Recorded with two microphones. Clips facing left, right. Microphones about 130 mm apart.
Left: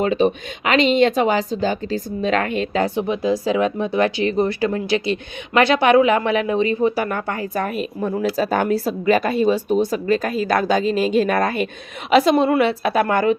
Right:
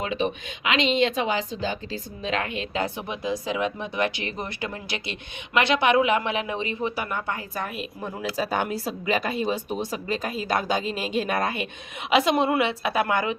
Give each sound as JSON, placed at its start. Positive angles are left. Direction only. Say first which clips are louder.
{"t": 0.0, "sound": "speech", "louder": "left 9 dB", "side_deg": 40}
{"t": 2.9, "sound": "speech", "louder": "left 9 dB", "side_deg": 30}
{"t": 7.1, "sound": "speech", "louder": "left 6 dB", "side_deg": 90}
{"t": 7.6, "sound": "speech", "louder": "left 9 dB", "side_deg": 50}
{"t": 10.8, "sound": "speech", "louder": "left 10 dB", "side_deg": -5}
{"t": 11.4, "sound": "speech", "louder": "left 7 dB", "side_deg": 45}